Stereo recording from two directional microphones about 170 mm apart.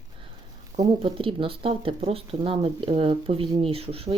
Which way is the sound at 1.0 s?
30° right (ahead or behind).